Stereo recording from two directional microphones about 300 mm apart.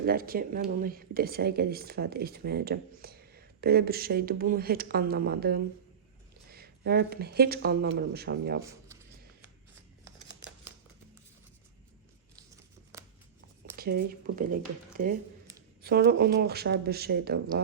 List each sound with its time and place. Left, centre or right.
0.0 s speech: right
12.9 s scissors: centre
13.7 s speech: right
15.8 s speech: right